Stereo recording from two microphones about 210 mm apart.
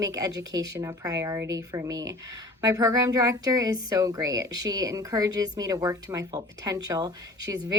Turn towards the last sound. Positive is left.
turn(degrees=-15)  # may be behind; listen again after turning